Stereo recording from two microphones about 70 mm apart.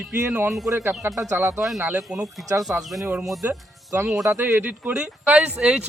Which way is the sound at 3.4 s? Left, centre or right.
Right.